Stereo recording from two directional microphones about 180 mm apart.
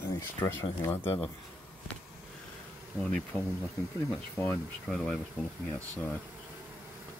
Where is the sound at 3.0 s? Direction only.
5° left (ahead or behind).